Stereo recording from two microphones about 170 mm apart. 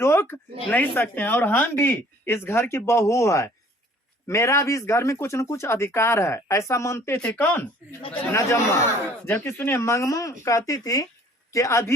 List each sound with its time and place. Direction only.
0.0 s speech: 15° left (ahead or behind)